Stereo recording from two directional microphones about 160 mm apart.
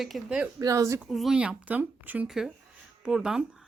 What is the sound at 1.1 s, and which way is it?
A woman's voice, centre (ahead or behind).